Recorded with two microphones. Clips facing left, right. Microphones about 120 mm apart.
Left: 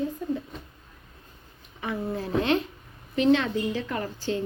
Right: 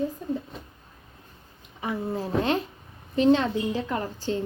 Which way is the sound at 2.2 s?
35° right (ahead or behind).